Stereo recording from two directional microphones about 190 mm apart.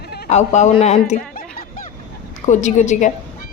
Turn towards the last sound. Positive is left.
turn(degrees=40)  # may be behind; listen again after turning